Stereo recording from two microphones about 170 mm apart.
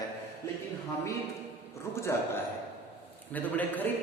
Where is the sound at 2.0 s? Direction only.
15° left (ahead or behind).